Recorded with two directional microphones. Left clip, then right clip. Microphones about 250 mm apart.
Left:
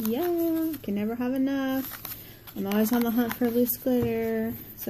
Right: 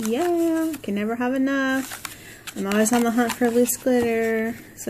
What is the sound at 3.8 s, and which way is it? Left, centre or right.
Speech, centre.